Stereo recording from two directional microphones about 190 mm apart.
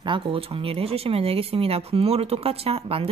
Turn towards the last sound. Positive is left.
turn(degrees=-30)  # may be behind; listen again after turning